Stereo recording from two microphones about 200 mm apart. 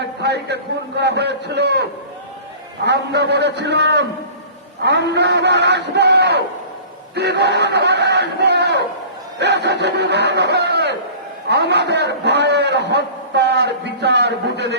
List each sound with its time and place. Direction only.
0.0 s a man's voice: 55° right (ahead or behind)